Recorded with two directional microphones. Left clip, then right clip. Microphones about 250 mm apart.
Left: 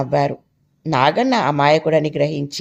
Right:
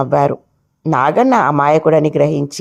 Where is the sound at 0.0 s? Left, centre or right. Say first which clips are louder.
Right 5 dB; centre.